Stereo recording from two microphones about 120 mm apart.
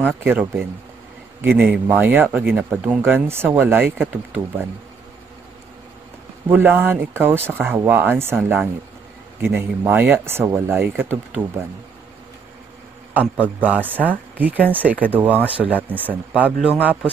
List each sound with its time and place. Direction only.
0.0 s speech: 15° right (ahead or behind)
6.5 s speech: 15° right (ahead or behind)
13.1 s speech: 15° right (ahead or behind)